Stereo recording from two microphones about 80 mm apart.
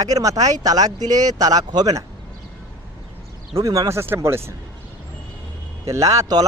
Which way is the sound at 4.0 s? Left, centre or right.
Right.